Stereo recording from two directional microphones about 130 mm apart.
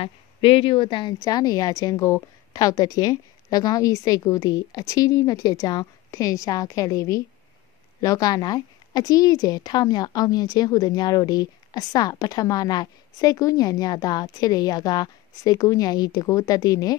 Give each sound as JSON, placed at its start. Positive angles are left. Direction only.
{"t": 0.0, "sound": "a woman's voice", "side_deg": 45}